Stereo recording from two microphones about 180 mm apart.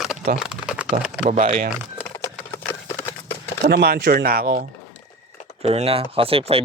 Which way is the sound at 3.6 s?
55° right (ahead or behind).